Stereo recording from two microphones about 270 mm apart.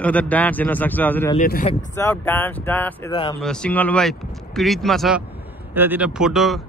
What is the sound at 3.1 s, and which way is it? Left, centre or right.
Speech, centre.